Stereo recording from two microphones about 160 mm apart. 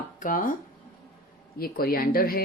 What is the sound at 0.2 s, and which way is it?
Speech, 55° left (ahead or behind).